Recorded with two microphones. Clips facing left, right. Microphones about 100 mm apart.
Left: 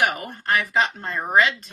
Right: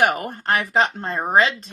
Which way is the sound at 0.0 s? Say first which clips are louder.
Right 4 dB; 40° right (ahead or behind).